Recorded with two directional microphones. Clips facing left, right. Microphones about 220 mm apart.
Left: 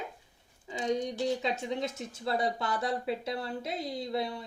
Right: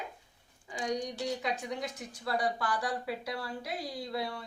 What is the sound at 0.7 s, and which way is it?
Speech, 25° left (ahead or behind).